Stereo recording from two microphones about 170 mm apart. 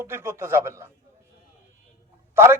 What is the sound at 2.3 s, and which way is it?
Speech, 15° right (ahead or behind).